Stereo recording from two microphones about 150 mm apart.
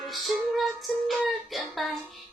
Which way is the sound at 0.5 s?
Centre (ahead or behind).